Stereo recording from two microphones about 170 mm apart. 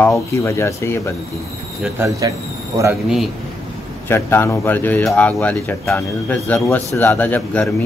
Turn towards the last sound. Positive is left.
turn(degrees=10)  # may be behind; listen again after turning